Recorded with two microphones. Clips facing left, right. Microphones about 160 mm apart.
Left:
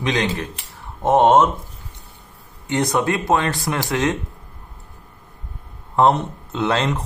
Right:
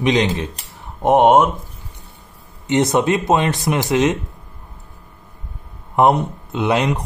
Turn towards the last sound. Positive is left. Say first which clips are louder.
# right 2 dB
turn(degrees=-15)  # may be behind; listen again after turning